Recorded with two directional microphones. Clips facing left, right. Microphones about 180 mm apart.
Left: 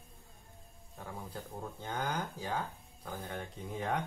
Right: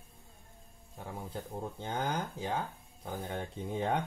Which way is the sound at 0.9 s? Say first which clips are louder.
Right 3 dB; 25° right (ahead or behind).